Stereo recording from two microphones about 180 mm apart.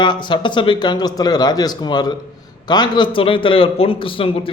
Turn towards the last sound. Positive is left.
turn(degrees=30)  # may be behind; listen again after turning